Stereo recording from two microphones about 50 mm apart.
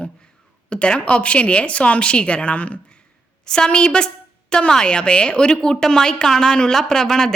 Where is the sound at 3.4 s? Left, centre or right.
Centre.